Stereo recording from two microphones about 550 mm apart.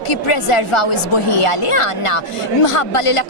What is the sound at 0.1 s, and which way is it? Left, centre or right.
Speech, left.